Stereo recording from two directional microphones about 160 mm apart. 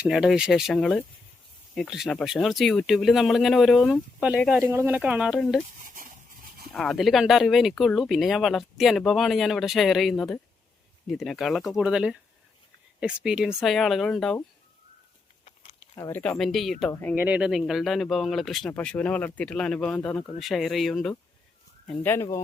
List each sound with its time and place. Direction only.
0.0 s speech: 5° right (ahead or behind)
5.4 s speech: 5° left (ahead or behind)
5.8 s a sound: 55° right (ahead or behind)
6.7 s speech: centre (ahead or behind)
16.0 s speech: 20° left (ahead or behind)
16.2 s speech: 5° left (ahead or behind)
16.9 s speech: 10° left (ahead or behind)
17.2 s speech: 10° right (ahead or behind); by 20.3 s 10° left (ahead or behind)
20.4 s speech: centre (ahead or behind)
21.8 s speech: 10° left (ahead or behind)